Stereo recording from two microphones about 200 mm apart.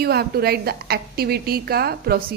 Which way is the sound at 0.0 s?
50° right (ahead or behind).